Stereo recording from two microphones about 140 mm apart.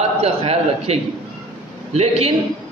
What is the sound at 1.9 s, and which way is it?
Speech, 45° right (ahead or behind).